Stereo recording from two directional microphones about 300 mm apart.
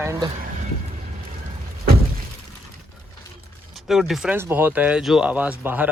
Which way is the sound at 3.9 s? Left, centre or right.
Centre.